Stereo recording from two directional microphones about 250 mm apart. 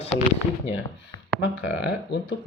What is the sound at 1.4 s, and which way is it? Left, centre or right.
Speech, left.